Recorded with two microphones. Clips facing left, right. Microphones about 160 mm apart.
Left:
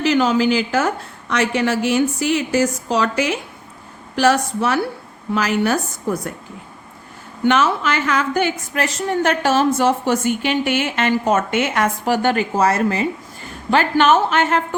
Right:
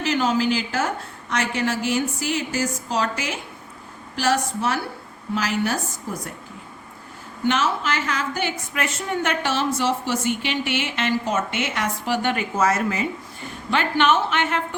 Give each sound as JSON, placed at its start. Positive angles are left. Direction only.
{"t": 0.0, "sound": "a woman's voice", "side_deg": 75}
{"t": 7.4, "sound": "a woman's voice", "side_deg": 60}
{"t": 8.8, "sound": "a woman's voice", "side_deg": 35}